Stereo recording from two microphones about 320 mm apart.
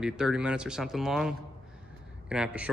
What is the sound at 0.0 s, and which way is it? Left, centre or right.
Speech, centre.